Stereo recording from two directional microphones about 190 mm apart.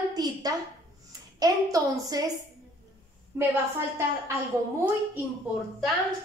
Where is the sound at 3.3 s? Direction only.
10° right (ahead or behind).